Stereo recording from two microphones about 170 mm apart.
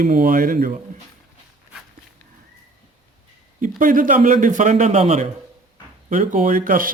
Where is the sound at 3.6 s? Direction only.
50° right (ahead or behind).